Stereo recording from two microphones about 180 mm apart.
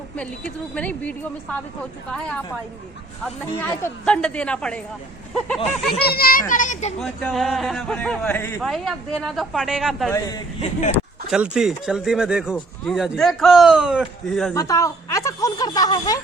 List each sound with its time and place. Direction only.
0.2 s a woman's voice: 5° left (ahead or behind)
3.6 s a woman's voice: 10° left (ahead or behind)
6.0 s a child's voice: 60° left (ahead or behind)
6.5 s a child's voice: 45° left (ahead or behind)
7.0 s speech: centre (ahead or behind)
8.6 s speech: centre (ahead or behind)
10.1 s a man's voice: 20° left (ahead or behind)
10.6 s speech: 40° left (ahead or behind)
11.3 s speech: 5° right (ahead or behind)
14.5 s a sound: 15° left (ahead or behind)